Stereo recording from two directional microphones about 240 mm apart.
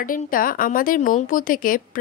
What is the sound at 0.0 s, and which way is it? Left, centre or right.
A woman's voice, left.